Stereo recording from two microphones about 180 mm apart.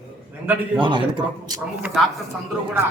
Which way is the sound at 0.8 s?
25° right (ahead or behind).